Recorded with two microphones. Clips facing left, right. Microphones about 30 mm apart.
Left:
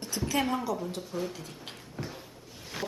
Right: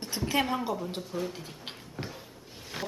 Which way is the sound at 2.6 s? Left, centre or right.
Centre.